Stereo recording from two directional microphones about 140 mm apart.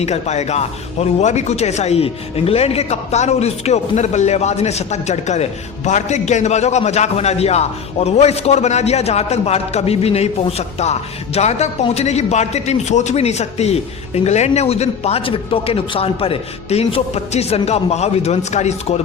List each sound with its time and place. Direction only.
0.0 s speech: 50° left (ahead or behind)